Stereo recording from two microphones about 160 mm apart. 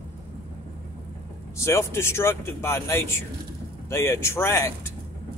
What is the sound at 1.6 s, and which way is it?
Speech, 15° left (ahead or behind).